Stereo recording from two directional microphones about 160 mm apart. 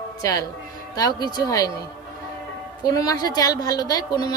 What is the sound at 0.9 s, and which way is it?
Speech, 20° left (ahead or behind).